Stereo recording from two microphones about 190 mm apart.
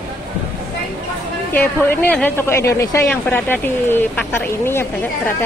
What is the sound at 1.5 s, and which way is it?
A woman's voice, 10° left (ahead or behind).